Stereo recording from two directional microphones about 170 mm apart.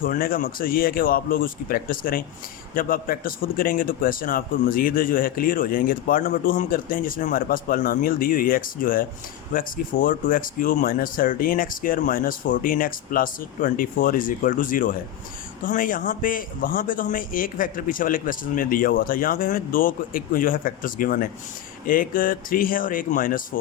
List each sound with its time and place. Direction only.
0.0 s a man's voice: 55° left (ahead or behind)